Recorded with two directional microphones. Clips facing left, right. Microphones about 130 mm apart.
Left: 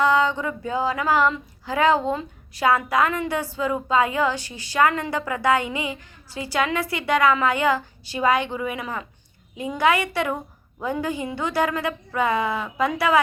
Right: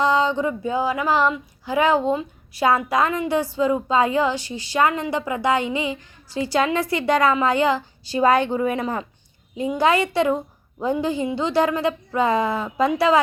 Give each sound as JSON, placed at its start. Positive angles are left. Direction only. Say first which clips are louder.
{"t": 0.0, "sound": "female singing", "louder": "right 1 dB", "side_deg": -20}
{"t": 6.9, "sound": "a woman's voice", "louder": "right 1 dB", "side_deg": -35}
{"t": 9.6, "sound": "female singing", "louder": "right 2 dB", "side_deg": -30}